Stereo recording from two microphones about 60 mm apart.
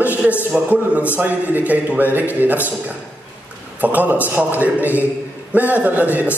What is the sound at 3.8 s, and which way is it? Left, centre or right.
A man's voice, right.